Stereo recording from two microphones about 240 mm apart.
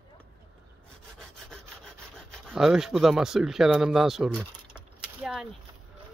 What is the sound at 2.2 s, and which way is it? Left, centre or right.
Speech, centre.